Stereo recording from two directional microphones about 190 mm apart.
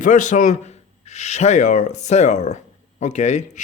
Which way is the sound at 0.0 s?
40° left (ahead or behind).